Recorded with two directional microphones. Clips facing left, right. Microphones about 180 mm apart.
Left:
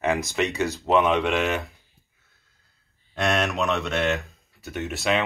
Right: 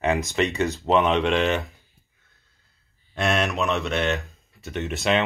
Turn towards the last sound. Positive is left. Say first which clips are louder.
# right 2 dB
turn(degrees=0)  # may be behind; listen again after turning